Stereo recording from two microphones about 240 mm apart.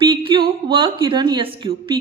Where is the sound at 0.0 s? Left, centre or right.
Right.